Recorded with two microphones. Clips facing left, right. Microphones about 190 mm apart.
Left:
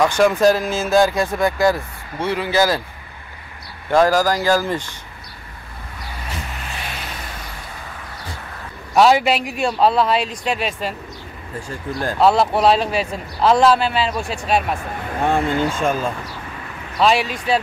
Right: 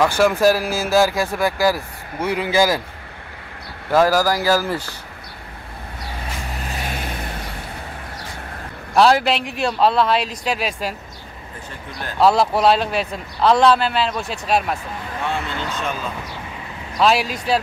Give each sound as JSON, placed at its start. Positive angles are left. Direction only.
{"t": 0.0, "sound": "speech", "side_deg": -5}
{"t": 3.9, "sound": "speech", "side_deg": -10}
{"t": 6.7, "sound": "vehicle", "side_deg": -40}
{"t": 8.9, "sound": "a man's voice", "side_deg": 0}
{"t": 12.2, "sound": "a man's voice", "side_deg": 0}
{"t": 15.1, "sound": "speech", "side_deg": 50}
{"t": 17.0, "sound": "a man's voice", "side_deg": -5}